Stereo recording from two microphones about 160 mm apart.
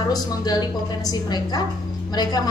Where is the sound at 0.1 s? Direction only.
25° left (ahead or behind).